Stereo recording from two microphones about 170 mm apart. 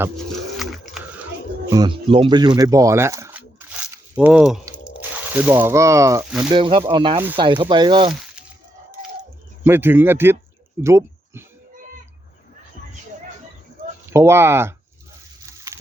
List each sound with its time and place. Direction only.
0.6 s sewing machine: centre (ahead or behind)
1.7 s speech: 25° right (ahead or behind)
2.6 s a sound: 20° right (ahead or behind); by 4.6 s 5° right (ahead or behind)
4.9 s crunch: 10° right (ahead or behind)
5.6 s speech: 15° right (ahead or behind)
6.5 s speech: 30° right (ahead or behind)
9.6 s speech: 15° right (ahead or behind)
14.1 s speech: 15° right (ahead or behind)
15.4 s a sound: 20° right (ahead or behind)